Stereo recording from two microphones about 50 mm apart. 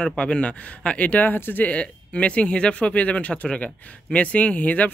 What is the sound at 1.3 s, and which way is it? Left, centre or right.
Speech, left.